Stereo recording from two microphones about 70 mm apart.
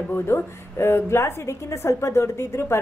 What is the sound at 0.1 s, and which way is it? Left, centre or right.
A woman's voice, left.